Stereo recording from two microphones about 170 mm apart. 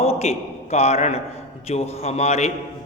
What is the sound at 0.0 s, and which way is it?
A man's voice, 35° left (ahead or behind).